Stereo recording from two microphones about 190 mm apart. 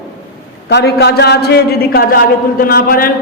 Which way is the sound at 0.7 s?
60° left (ahead or behind).